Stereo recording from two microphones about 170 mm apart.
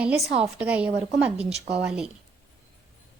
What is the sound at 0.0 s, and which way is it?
A woman's voice, 5° right (ahead or behind).